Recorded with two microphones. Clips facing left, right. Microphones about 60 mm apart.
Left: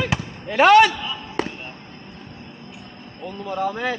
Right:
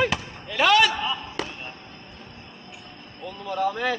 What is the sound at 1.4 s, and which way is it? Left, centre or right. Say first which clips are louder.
Basketball bounce: left 11 dB; left.